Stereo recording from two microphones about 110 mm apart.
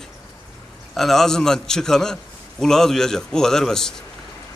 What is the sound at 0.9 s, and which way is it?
Speech, 5° left (ahead or behind).